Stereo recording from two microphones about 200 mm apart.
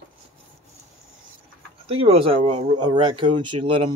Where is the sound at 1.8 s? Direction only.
30° right (ahead or behind).